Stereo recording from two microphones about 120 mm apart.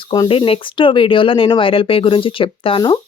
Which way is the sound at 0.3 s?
50° left (ahead or behind).